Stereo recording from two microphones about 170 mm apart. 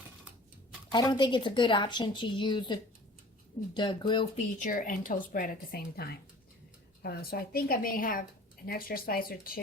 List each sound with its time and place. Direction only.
0.9 s speech: 25° left (ahead or behind)
3.8 s speech: 25° left (ahead or behind)
4.4 s a woman's voice: 50° left (ahead or behind)